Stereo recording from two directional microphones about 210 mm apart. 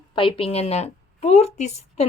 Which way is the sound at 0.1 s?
25° left (ahead or behind).